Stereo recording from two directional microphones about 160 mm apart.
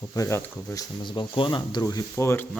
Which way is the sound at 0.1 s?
20° left (ahead or behind).